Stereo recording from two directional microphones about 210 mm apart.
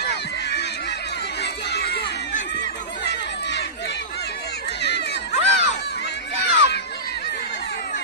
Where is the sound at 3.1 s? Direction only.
55° left (ahead or behind).